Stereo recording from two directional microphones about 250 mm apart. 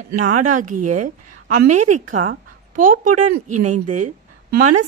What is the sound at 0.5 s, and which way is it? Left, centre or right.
Speech, right.